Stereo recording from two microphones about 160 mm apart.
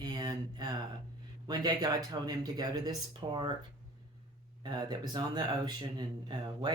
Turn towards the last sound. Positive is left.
turn(degrees=-30)  # may be behind; listen again after turning